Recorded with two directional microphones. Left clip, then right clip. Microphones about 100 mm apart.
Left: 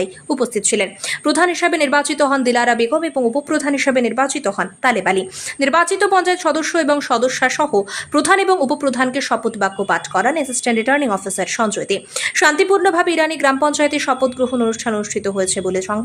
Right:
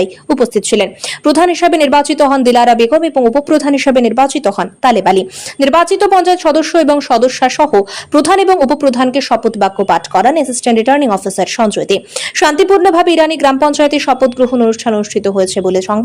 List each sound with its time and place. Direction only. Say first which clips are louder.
0.0 s speech: right 8 dB; 20° right (ahead or behind)